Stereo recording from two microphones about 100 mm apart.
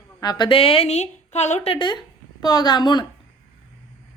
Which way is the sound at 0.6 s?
75° left (ahead or behind).